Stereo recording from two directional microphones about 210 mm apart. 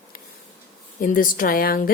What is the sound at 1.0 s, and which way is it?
Speech, 40° left (ahead or behind).